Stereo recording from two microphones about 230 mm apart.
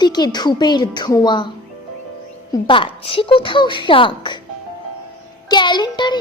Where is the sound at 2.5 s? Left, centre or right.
Left.